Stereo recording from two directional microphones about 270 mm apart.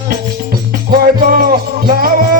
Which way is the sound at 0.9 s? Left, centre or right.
Right.